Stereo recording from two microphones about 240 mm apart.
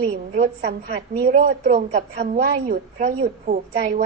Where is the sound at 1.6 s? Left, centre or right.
Right.